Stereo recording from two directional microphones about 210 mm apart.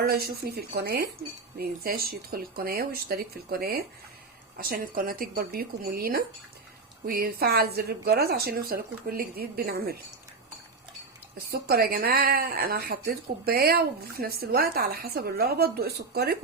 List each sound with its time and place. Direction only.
0.0 s a woman's voice: 45° right (ahead or behind)
11.5 s a woman's voice: 45° right (ahead or behind)